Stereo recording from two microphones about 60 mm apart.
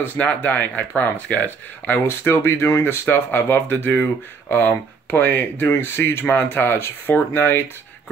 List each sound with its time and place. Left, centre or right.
0.0 s speech: left
2.0 s speech: left
3.7 s speech: left